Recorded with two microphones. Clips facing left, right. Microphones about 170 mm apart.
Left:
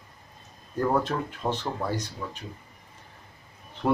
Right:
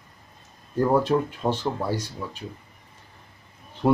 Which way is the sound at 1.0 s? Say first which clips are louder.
Right 6 dB; 10° right (ahead or behind).